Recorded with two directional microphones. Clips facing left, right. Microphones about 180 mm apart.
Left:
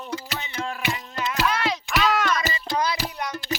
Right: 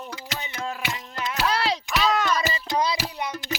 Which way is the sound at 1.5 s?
35° right (ahead or behind).